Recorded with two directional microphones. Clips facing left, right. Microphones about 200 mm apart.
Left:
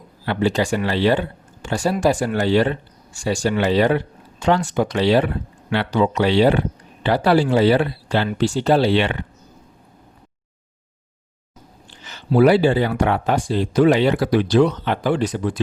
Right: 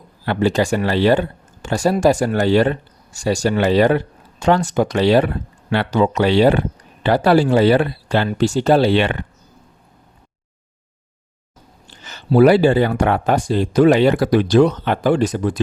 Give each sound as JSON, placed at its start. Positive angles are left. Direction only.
{"t": 0.3, "sound": "speech", "side_deg": -45}
{"t": 11.9, "sound": "speech", "side_deg": -45}